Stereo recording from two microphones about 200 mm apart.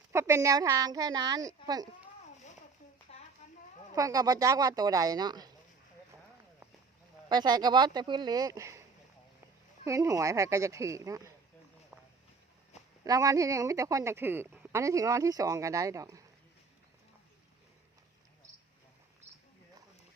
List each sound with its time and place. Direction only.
0.1 s a woman's voice: 15° right (ahead or behind)
3.1 s a sound: 30° left (ahead or behind)
3.9 s a woman's voice: 15° right (ahead or behind)
7.3 s speech: 20° right (ahead or behind)
9.8 s a woman's voice: 15° right (ahead or behind)
13.1 s a woman's voice: 20° right (ahead or behind)